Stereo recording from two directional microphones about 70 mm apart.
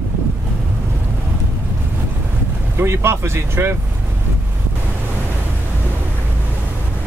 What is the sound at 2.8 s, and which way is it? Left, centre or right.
Speech, right.